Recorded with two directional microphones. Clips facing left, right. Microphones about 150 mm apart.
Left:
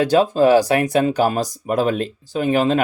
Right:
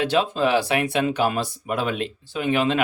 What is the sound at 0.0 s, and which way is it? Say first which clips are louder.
Speech: left 6 dB; 40° left (ahead or behind).